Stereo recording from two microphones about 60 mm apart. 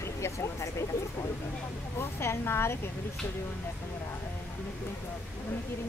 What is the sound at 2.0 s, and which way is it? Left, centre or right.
Speech, left.